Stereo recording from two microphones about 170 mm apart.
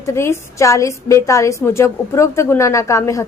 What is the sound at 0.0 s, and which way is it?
A woman's voice, 15° left (ahead or behind).